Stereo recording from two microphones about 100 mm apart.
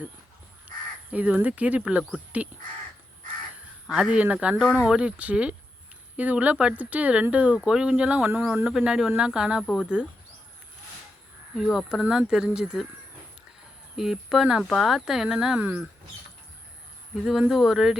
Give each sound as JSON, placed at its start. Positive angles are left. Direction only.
{"t": 1.1, "sound": "speech", "side_deg": -15}
{"t": 3.8, "sound": "speech", "side_deg": -10}
{"t": 8.6, "sound": "speech", "side_deg": -5}
{"t": 11.5, "sound": "speech", "side_deg": 0}
{"t": 13.9, "sound": "speech", "side_deg": -5}
{"t": 17.2, "sound": "speech", "side_deg": -5}